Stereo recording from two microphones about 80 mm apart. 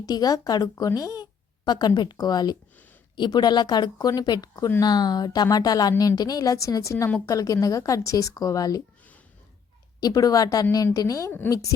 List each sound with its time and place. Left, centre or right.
0.0 s speech: left
10.0 s speech: left